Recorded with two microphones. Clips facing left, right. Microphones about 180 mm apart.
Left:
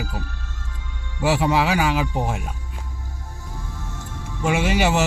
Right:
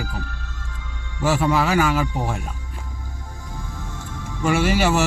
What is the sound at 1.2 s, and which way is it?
Speech, 15° left (ahead or behind).